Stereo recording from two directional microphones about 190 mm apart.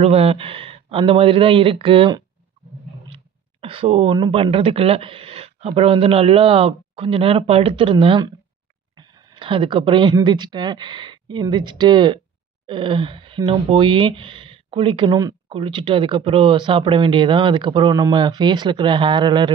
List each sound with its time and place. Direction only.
0.0 s speech: 30° right (ahead or behind)
3.6 s speech: 30° right (ahead or behind)